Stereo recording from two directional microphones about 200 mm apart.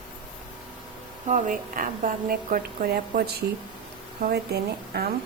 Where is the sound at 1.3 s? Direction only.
40° right (ahead or behind).